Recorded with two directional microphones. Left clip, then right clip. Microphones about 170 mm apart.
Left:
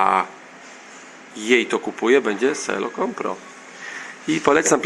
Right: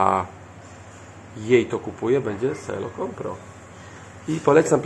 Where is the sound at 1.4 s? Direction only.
Centre (ahead or behind).